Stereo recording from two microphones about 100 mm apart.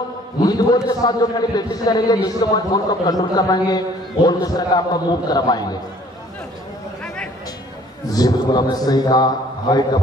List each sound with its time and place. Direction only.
0.4 s a man's voice: 40° left (ahead or behind)
8.1 s a man's voice: 40° left (ahead or behind)